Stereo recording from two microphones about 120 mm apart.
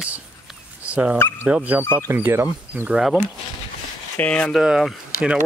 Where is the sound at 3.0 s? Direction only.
Centre (ahead or behind).